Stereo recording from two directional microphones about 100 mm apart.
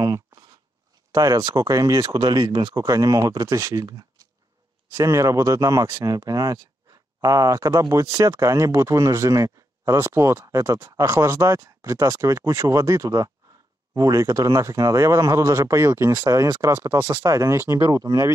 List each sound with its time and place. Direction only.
1.1 s speech: 35° right (ahead or behind)
2.7 s speech: 35° right (ahead or behind)